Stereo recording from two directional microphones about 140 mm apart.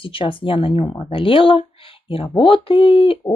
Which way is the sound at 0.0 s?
40° left (ahead or behind).